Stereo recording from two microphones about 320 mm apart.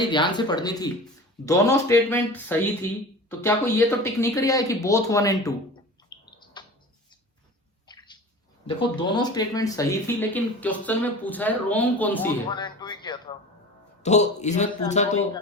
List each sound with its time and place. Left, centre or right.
0.0 s speech: centre
6.4 s bird: centre
7.9 s bathtub: centre
8.6 s speech: centre